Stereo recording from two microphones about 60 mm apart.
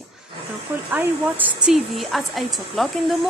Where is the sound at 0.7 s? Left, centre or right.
Right.